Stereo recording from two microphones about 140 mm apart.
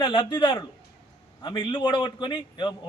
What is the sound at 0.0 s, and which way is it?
A man's voice, 30° left (ahead or behind).